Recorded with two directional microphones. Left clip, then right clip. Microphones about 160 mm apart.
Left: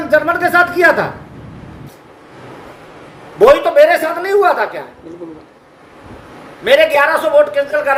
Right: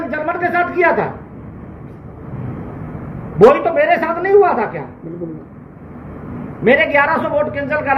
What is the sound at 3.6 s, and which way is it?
A man's voice, 30° left (ahead or behind).